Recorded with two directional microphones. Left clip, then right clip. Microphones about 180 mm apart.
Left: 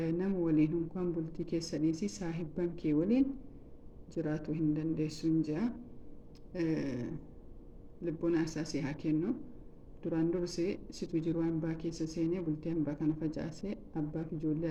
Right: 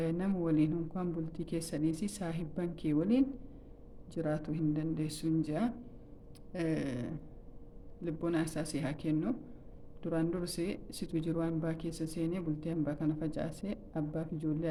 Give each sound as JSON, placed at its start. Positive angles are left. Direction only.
{"t": 0.0, "sound": "speech", "side_deg": -15}